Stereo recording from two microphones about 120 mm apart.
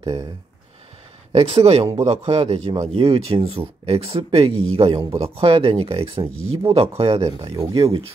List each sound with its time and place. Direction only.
1.3 s a man's voice: 60° right (ahead or behind)